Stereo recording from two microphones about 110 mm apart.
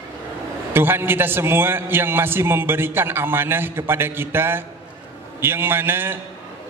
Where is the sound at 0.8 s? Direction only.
20° right (ahead or behind).